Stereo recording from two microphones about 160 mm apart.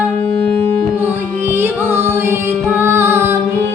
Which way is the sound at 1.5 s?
15° right (ahead or behind).